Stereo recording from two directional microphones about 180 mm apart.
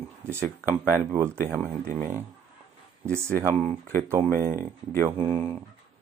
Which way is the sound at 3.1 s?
15° right (ahead or behind).